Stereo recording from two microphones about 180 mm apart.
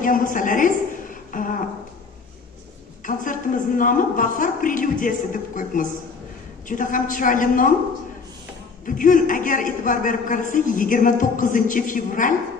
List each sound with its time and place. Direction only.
0.0 s a man's voice: 50° left (ahead or behind)
1.3 s a sound: 50° left (ahead or behind)
3.1 s a man's voice: 45° left (ahead or behind)
8.8 s a man's voice: 45° left (ahead or behind)